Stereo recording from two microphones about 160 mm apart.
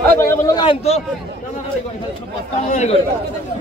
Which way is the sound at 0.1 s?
15° left (ahead or behind).